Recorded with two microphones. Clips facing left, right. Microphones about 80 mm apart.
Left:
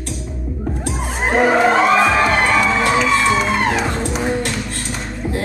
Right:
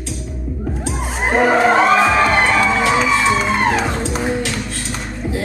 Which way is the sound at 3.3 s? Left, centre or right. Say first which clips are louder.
Even; centre.